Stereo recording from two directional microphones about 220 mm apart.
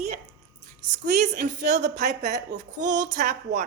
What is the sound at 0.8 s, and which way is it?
A woman's voice, 35° right (ahead or behind).